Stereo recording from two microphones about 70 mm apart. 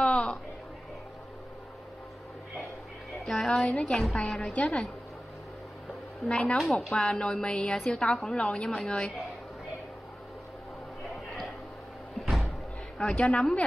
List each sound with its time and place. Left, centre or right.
0.0 s a sound: centre
3.4 s a woman's voice: centre
4.2 s a woman's voice: centre
6.2 s a woman's voice: centre
6.6 s a woman's voice: centre
6.9 s a woman's voice: centre
12.2 s slam: centre
13.1 s a woman's voice: centre